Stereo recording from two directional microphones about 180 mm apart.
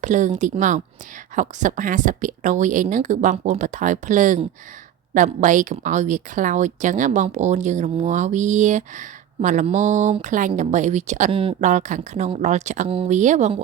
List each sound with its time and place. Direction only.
0.0 s speech: 45° right (ahead or behind)